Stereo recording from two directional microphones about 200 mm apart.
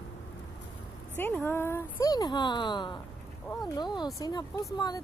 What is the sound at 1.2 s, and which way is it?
Speech, 10° left (ahead or behind).